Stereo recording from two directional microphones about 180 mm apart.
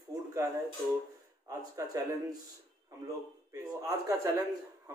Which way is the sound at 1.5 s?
15° right (ahead or behind).